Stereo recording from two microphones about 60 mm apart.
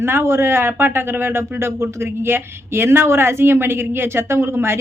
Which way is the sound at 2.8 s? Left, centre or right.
Right.